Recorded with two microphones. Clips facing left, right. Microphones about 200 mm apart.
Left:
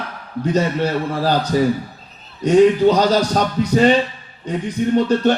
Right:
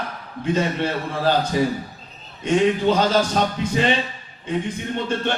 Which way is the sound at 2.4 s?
40° left (ahead or behind).